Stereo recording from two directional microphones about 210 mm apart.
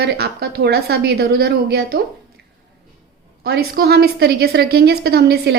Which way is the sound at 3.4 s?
45° right (ahead or behind).